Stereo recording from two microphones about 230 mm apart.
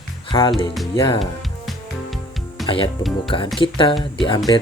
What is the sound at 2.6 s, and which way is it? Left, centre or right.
Speech, left.